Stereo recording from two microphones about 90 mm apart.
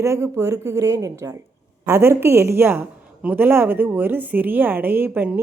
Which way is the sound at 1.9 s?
25° right (ahead or behind).